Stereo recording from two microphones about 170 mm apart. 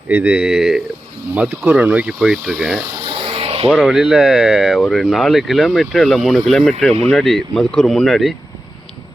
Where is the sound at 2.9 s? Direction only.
35° right (ahead or behind).